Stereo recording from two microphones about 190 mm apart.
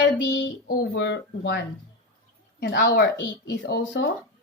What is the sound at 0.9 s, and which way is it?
Speech, 70° left (ahead or behind).